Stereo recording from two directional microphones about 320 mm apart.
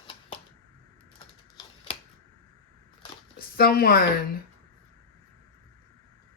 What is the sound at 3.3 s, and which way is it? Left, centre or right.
Speech, left.